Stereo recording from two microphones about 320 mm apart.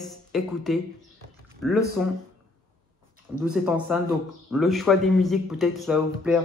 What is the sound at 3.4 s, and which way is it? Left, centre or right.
A man's voice, centre.